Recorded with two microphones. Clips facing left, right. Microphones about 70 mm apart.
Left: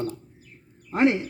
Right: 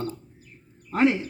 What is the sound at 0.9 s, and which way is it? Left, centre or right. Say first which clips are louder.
Speech: even; centre.